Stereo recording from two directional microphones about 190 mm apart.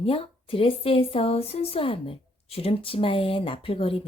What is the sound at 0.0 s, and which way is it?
Speech, 30° left (ahead or behind).